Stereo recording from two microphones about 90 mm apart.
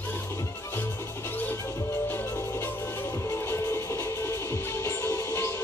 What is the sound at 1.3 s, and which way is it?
Music, 20° left (ahead or behind).